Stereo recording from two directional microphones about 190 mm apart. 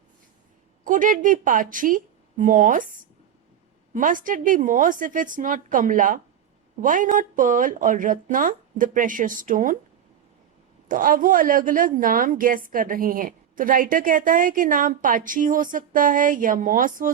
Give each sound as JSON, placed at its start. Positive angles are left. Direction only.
{"t": 0.9, "sound": "a woman's voice", "side_deg": -45}
{"t": 3.9, "sound": "a woman's voice", "side_deg": -45}
{"t": 10.8, "sound": "a woman's voice", "side_deg": -45}